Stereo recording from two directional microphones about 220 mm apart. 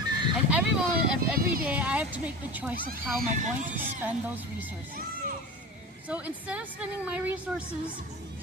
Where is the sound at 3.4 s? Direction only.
35° right (ahead or behind).